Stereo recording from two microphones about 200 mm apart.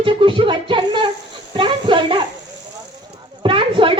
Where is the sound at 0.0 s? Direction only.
25° right (ahead or behind).